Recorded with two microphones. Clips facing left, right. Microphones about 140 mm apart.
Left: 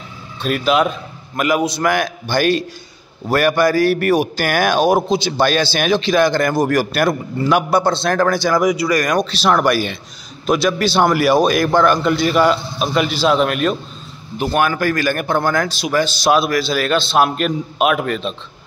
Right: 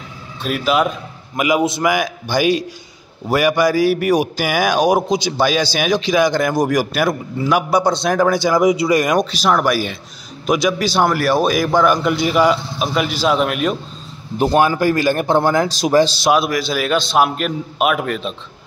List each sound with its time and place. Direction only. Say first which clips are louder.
0.4 s speech: left 1 dB; 5° right (ahead or behind)
1.3 s a man's voice: right 1 dB; 15° right (ahead or behind)
1.8 s a man's voice: even; 10° right (ahead or behind)
14.4 s speech: right 3 dB; 30° right (ahead or behind)
16.3 s a man's voice: left 1 dB; 15° right (ahead or behind)